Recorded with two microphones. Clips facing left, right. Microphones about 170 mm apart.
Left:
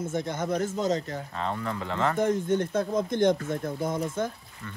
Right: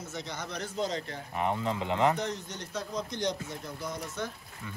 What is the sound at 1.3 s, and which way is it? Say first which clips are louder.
Speech: right 2 dB; 15° right (ahead or behind).